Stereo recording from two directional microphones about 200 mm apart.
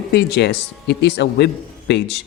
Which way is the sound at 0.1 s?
55° left (ahead or behind).